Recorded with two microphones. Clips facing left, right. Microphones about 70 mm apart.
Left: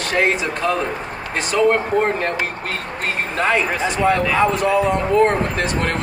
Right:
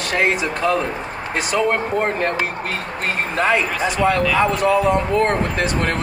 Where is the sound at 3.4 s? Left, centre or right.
Centre.